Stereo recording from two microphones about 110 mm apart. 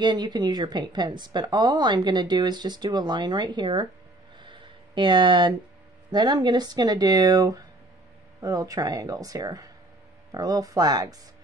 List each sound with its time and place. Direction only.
0.0 s a woman's voice: 40° right (ahead or behind)
4.4 s a sound: 45° right (ahead or behind)
6.1 s a woman's voice: 45° right (ahead or behind)